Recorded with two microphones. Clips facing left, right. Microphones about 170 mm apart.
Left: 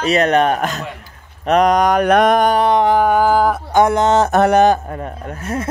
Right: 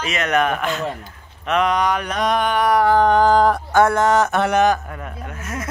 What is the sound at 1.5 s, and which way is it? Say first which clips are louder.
Mantra: left 6 dB; 40° left (ahead or behind).